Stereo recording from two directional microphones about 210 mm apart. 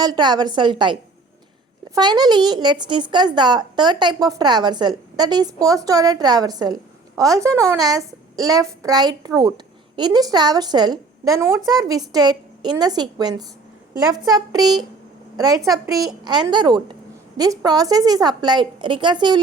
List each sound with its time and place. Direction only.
0.0 s a woman's voice: 20° right (ahead or behind)
2.0 s a woman's voice: 20° right (ahead or behind)